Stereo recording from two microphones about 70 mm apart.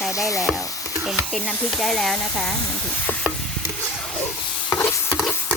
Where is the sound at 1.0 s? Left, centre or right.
Centre.